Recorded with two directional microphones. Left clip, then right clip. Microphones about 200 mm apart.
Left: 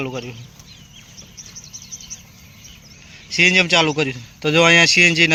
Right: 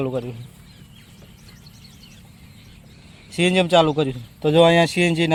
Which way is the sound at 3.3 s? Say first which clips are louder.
Left 3 dB; 25° right (ahead or behind).